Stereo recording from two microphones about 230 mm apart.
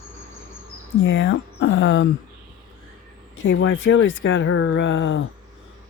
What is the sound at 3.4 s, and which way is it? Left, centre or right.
Speech, left.